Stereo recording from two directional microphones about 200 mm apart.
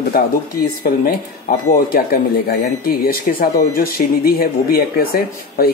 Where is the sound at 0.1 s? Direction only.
50° left (ahead or behind).